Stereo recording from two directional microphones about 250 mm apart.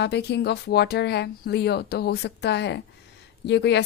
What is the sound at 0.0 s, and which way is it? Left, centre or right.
Speech, left.